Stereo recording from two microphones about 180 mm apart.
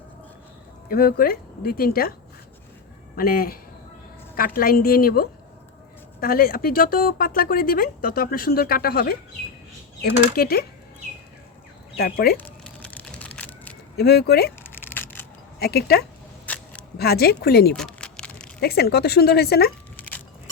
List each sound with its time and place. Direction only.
0.9 s speech: 55° left (ahead or behind)
3.2 s speech: 55° left (ahead or behind)
11.9 s speech: 55° left (ahead or behind)
12.6 s crushing: 5° left (ahead or behind)
13.9 s speech: 60° left (ahead or behind)
14.6 s a sound: 10° left (ahead or behind)
15.5 s speech: 60° left (ahead or behind)
16.5 s single-lens reflex camera: 10° left (ahead or behind)
17.0 s speech: 60° left (ahead or behind)
17.7 s a sound: 5° left (ahead or behind)
18.6 s speech: 60° left (ahead or behind)
20.0 s keys jangling: 10° left (ahead or behind)